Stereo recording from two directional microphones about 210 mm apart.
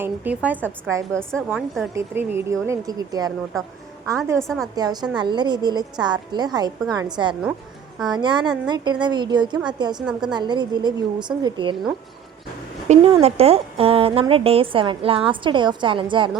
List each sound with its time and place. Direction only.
0.0 s speech: 10° right (ahead or behind)
1.5 s a woman's voice: centre (ahead or behind)
2.0 s speech: 10° right (ahead or behind)
4.4 s a woman's voice: centre (ahead or behind)
4.7 s a woman's voice: 20° right (ahead or behind)
10.1 s a woman's voice: 5° right (ahead or behind)
10.3 s a woman's voice: 20° right (ahead or behind)
12.9 s a woman's voice: 30° right (ahead or behind)